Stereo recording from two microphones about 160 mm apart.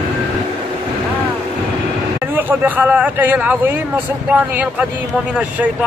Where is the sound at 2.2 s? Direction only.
10° right (ahead or behind).